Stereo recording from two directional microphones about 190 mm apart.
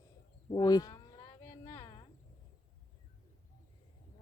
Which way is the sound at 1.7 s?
20° left (ahead or behind).